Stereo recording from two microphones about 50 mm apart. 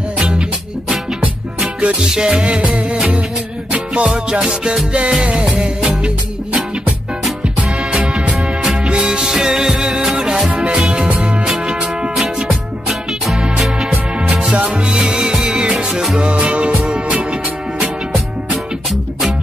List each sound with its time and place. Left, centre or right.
0.2 s music: centre
2.4 s music: right
7.9 s music: centre
12.4 s music: centre
13.4 s music: centre